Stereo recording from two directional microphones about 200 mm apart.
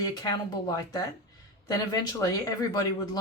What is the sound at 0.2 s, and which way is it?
Speech, 20° left (ahead or behind).